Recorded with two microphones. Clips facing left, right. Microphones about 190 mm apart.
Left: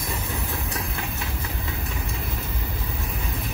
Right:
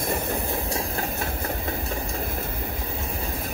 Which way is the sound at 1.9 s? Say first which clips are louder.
Right 3 dB; 35° right (ahead or behind).